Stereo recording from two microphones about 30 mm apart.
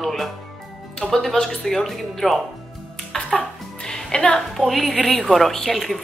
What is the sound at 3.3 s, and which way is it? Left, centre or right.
Music, left.